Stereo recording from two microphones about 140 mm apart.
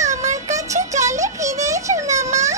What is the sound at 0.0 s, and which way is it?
Music, 55° right (ahead or behind).